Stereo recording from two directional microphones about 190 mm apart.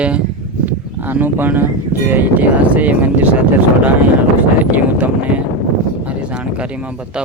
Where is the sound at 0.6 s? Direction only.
10° right (ahead or behind).